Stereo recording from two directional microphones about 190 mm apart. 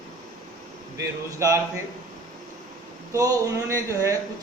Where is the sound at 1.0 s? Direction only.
15° right (ahead or behind).